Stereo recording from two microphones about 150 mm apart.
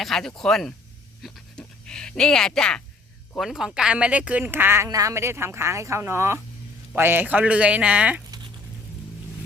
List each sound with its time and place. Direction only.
0.0 s speech: 5° left (ahead or behind)
1.2 s pant: 5° left (ahead or behind)
3.3 s a woman's voice: centre (ahead or behind)